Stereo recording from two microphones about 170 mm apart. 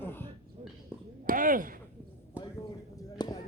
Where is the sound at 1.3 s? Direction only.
55° right (ahead or behind).